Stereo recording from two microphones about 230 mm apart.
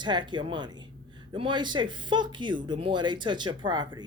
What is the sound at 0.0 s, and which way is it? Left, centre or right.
Speech, centre.